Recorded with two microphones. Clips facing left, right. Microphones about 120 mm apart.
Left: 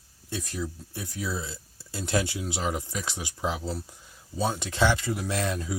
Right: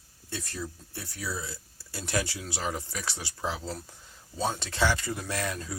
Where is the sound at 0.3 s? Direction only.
15° left (ahead or behind).